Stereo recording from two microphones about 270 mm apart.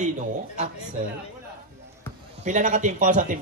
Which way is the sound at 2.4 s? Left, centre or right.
Right.